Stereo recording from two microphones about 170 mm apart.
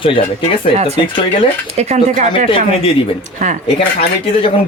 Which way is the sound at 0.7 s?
40° right (ahead or behind).